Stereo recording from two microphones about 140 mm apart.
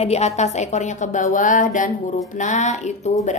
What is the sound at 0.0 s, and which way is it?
A woman's voice, 50° left (ahead or behind).